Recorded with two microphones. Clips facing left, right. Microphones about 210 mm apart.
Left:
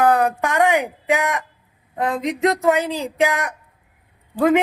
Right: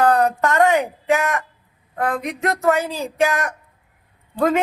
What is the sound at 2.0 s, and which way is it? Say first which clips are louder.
A man's voice: left 3 dB; 20° left (ahead or behind).